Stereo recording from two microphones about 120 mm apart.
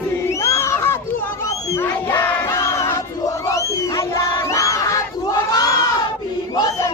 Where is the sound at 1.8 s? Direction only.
20° left (ahead or behind).